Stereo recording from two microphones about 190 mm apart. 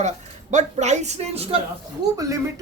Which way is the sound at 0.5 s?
35° right (ahead or behind).